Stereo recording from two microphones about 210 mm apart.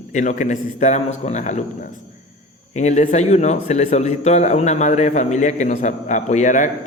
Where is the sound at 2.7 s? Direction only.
35° left (ahead or behind).